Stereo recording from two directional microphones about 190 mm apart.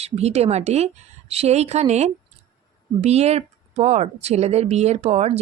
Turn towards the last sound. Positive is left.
turn(degrees=-35)  # may be behind; listen again after turning